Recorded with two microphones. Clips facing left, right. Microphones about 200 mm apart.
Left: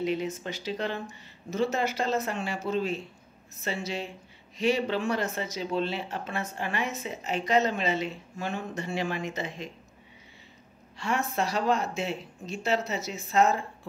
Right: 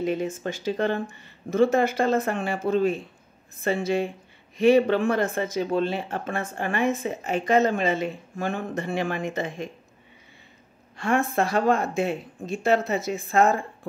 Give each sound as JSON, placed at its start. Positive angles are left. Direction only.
{"t": 0.0, "sound": "speech", "side_deg": -50}
{"t": 11.0, "sound": "speech", "side_deg": -50}